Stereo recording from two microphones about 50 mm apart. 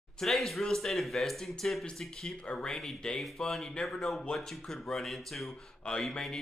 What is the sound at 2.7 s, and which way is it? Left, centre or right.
Speech, centre.